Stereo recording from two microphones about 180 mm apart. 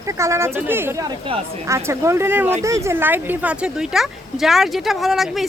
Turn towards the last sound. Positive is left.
turn(degrees=0)  # may be behind; listen again after turning